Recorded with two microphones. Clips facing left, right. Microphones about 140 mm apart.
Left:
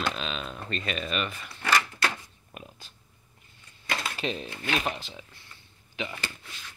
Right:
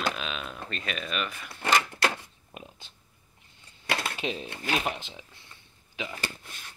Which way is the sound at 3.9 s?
65° right (ahead or behind).